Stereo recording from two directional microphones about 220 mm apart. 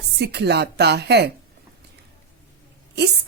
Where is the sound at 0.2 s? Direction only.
50° right (ahead or behind).